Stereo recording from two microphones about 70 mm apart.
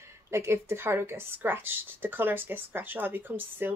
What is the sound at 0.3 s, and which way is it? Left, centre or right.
A woman's voice, right.